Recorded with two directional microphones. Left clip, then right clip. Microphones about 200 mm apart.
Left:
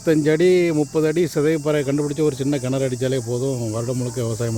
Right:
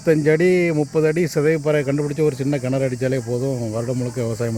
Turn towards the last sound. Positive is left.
turn(degrees=-5)  # may be behind; listen again after turning